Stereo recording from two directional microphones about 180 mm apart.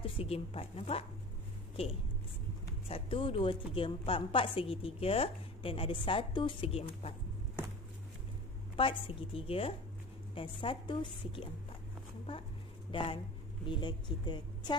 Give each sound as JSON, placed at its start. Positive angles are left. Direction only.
{"t": 0.0, "sound": "a woman's voice", "side_deg": 30}
{"t": 2.9, "sound": "a woman's voice", "side_deg": 30}
{"t": 8.7, "sound": "a woman's voice", "side_deg": 30}
{"t": 12.9, "sound": "a woman's voice", "side_deg": 30}